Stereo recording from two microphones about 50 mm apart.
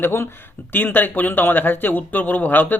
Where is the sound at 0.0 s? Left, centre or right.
Left.